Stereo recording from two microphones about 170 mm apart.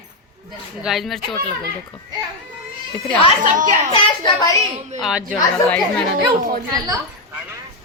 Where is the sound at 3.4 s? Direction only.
50° right (ahead or behind).